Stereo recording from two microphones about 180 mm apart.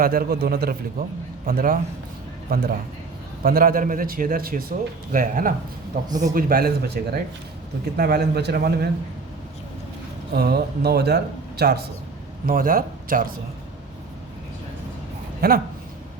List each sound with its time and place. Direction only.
0.0 s a man's voice: 55° right (ahead or behind)
6.1 s speech: 20° right (ahead or behind)
6.3 s speech: 55° right (ahead or behind)
10.3 s a man's voice: 60° right (ahead or behind)
15.4 s a man's voice: 55° right (ahead or behind)